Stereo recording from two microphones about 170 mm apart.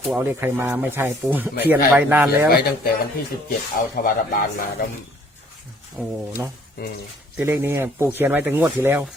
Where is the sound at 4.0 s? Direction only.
55° left (ahead or behind).